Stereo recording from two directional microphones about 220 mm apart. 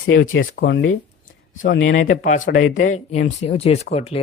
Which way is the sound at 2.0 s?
35° left (ahead or behind).